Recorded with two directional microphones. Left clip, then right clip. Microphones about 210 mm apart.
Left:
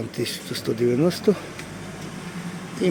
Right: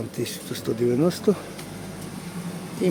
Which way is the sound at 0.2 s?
Centre (ahead or behind).